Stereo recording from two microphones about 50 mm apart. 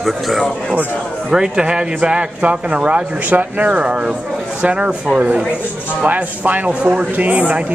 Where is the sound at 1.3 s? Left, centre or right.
Centre.